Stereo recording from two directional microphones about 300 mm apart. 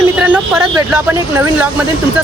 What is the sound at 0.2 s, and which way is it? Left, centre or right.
Speech, centre.